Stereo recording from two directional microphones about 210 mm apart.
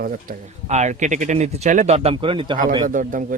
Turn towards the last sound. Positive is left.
turn(degrees=-40)  # may be behind; listen again after turning